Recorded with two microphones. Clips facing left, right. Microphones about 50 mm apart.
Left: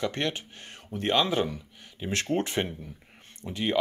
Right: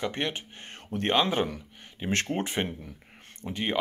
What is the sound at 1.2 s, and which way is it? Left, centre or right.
Speech, right.